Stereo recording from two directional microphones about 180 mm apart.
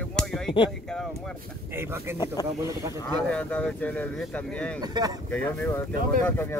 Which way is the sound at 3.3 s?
5° left (ahead or behind).